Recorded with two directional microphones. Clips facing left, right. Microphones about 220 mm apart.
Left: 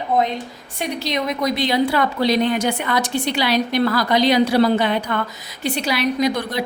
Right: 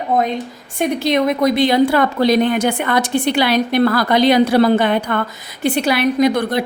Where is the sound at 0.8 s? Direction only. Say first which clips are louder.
Right 7 dB; 55° right (ahead or behind).